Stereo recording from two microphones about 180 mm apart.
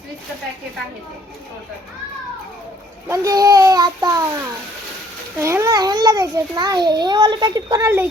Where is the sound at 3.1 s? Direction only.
20° right (ahead or behind).